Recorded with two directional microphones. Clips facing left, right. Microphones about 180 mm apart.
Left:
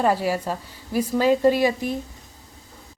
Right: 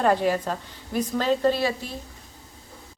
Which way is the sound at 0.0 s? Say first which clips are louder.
Even; 5° left (ahead or behind).